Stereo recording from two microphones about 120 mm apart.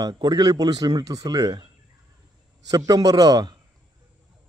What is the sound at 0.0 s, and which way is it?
A man's voice, 35° right (ahead or behind).